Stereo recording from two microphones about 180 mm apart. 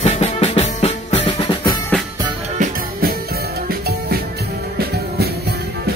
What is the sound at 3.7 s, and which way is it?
Music, 60° right (ahead or behind).